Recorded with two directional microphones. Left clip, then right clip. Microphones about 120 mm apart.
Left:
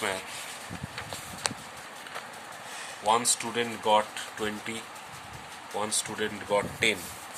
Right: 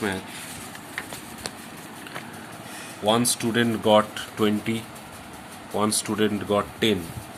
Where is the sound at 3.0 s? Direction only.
30° right (ahead or behind).